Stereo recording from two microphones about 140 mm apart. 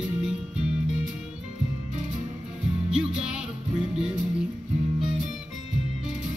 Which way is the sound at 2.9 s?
5° right (ahead or behind).